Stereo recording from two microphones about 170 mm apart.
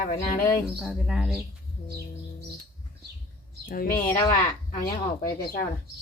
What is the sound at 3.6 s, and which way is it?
Speech, 55° left (ahead or behind).